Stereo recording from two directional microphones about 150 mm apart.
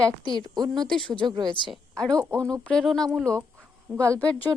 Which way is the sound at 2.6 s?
5° left (ahead or behind).